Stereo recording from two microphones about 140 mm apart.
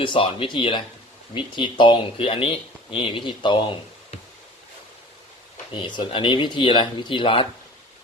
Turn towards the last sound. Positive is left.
turn(degrees=40)  # may be behind; listen again after turning